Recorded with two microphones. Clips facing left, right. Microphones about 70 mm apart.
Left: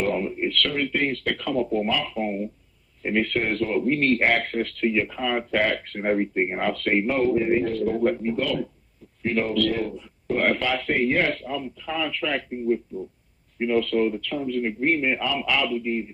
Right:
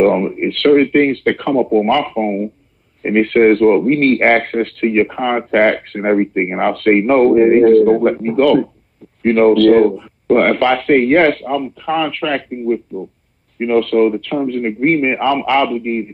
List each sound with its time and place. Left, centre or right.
0.0 s speech: right